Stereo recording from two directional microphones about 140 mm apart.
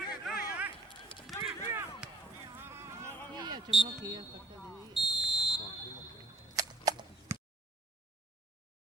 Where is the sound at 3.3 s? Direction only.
30° right (ahead or behind).